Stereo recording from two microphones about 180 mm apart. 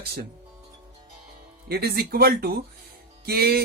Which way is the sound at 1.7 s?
60° right (ahead or behind).